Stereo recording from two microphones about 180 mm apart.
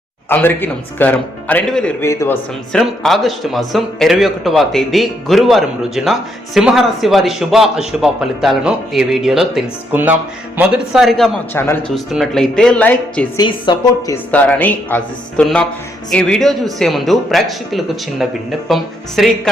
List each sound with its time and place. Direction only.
0.3 s speech: 10° left (ahead or behind)
2.8 s a man's voice: centre (ahead or behind)
11.5 s a man's voice: 15° left (ahead or behind)
13.4 s a woman's voice: 25° left (ahead or behind)
14.3 s a man's voice: 10° left (ahead or behind)